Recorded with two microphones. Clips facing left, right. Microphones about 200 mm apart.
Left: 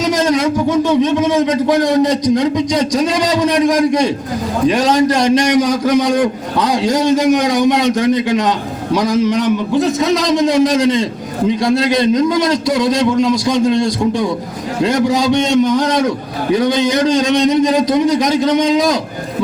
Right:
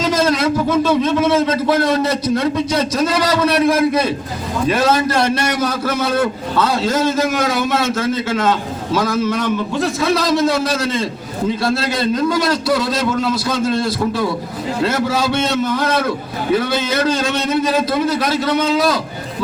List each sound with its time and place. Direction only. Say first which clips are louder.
0.0 s a man's voice: left 2 dB; 15° left (ahead or behind)